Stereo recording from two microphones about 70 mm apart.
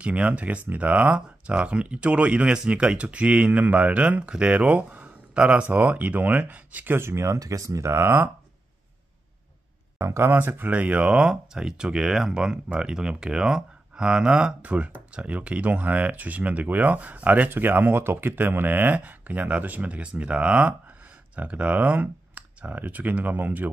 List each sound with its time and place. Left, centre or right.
0.0 s speech: centre
7.0 s speech: right
7.3 s speech: right
9.9 s speech: right